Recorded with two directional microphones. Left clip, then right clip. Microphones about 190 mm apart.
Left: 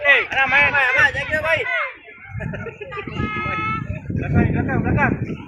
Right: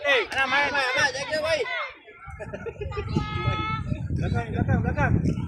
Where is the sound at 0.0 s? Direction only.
70° right (ahead or behind).